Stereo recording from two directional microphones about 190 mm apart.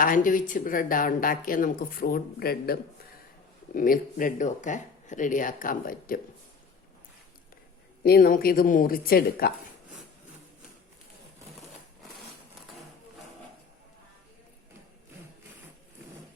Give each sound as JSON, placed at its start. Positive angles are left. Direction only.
{"t": 0.0, "sound": "a woman's voice", "side_deg": 45}
{"t": 3.8, "sound": "a woman's voice", "side_deg": 45}
{"t": 8.0, "sound": "a woman's voice", "side_deg": 55}